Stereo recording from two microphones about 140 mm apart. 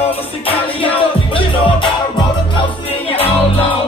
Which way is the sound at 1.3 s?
35° left (ahead or behind).